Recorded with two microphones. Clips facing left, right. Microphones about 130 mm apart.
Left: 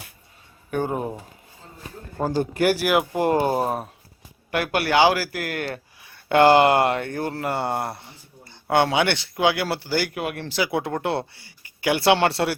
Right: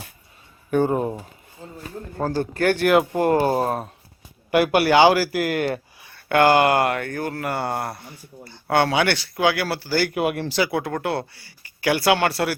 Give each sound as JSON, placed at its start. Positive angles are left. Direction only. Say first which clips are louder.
{"t": 0.7, "sound": "speech", "louder": "right 5 dB", "side_deg": 5}
{"t": 2.1, "sound": "speech", "louder": "left 1 dB", "side_deg": 10}
{"t": 3.2, "sound": "speech", "louder": "right 2 dB", "side_deg": 15}
{"t": 4.5, "sound": "speech", "louder": "right 4 dB", "side_deg": -10}
{"t": 6.1, "sound": "speech", "louder": "left 1 dB", "side_deg": 25}
{"t": 10.2, "sound": "speech", "louder": "right 6 dB", "side_deg": -5}
{"t": 10.7, "sound": "speech", "louder": "even", "side_deg": 25}